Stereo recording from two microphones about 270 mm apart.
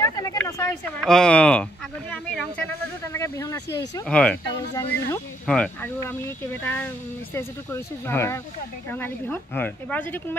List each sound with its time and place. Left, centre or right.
0.0 s speech: centre